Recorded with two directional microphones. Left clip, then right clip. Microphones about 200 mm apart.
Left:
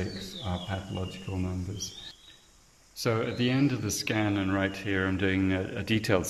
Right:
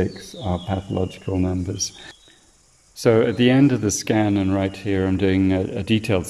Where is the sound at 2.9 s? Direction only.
35° right (ahead or behind); by 6.3 s 10° right (ahead or behind).